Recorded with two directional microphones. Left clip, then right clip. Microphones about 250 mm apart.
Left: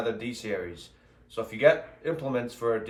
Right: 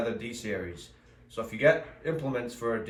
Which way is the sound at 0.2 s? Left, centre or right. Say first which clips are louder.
Left 2 dB; centre.